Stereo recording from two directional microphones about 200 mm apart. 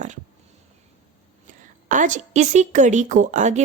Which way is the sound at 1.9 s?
40° right (ahead or behind).